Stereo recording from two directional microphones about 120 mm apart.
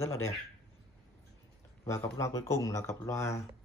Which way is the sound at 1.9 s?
25° left (ahead or behind).